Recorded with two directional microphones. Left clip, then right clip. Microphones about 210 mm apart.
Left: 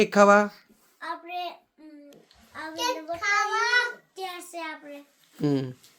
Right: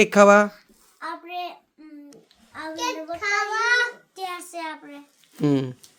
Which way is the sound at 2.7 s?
10° left (ahead or behind).